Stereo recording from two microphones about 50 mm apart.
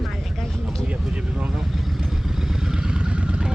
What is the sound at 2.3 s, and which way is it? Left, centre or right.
Vehicle, centre.